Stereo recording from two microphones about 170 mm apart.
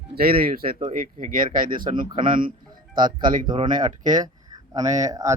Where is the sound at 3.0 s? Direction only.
25° right (ahead or behind).